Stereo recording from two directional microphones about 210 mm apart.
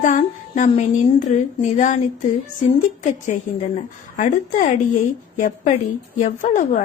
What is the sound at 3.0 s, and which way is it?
A woman's voice, 35° left (ahead or behind).